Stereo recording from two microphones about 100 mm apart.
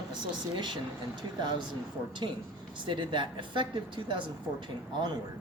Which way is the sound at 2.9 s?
55° right (ahead or behind).